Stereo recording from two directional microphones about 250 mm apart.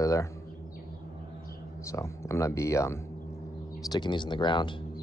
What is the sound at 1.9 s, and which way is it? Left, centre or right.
Speech, centre.